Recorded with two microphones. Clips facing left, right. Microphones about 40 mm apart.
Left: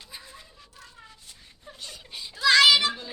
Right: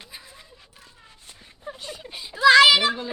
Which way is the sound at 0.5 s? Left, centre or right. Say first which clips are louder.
Left 2 dB; right.